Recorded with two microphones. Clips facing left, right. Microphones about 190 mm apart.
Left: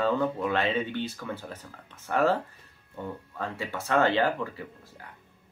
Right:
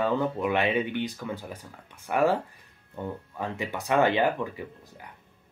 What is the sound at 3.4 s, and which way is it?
Speech, 15° right (ahead or behind).